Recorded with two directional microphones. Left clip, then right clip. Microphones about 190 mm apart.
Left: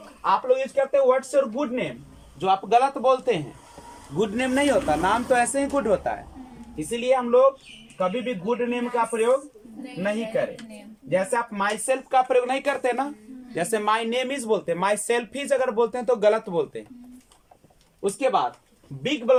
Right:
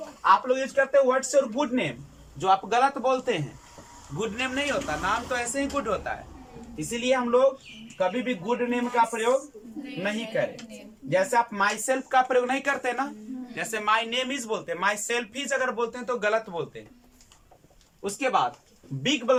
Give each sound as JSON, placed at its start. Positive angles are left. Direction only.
{"t": 0.2, "sound": "speech", "side_deg": 20}
{"t": 4.2, "sound": "speech", "side_deg": 35}
{"t": 6.7, "sound": "speech", "side_deg": 15}
{"t": 11.1, "sound": "speech", "side_deg": 10}
{"t": 18.2, "sound": "speech", "side_deg": 20}